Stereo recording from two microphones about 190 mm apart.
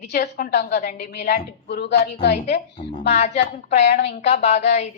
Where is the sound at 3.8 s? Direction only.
60° left (ahead or behind).